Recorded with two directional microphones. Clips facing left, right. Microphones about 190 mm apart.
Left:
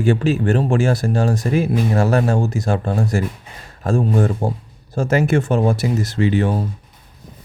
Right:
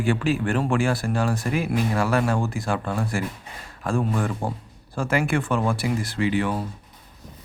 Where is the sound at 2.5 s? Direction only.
25° left (ahead or behind).